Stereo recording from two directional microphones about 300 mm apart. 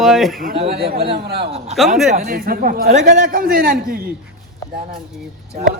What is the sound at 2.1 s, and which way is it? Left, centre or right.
A man's voice, right.